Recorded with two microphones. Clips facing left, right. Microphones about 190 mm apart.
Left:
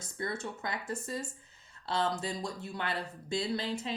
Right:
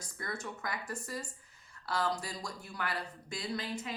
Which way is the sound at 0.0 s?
25° left (ahead or behind).